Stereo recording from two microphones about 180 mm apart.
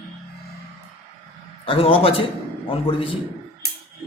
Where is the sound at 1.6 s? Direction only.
30° left (ahead or behind).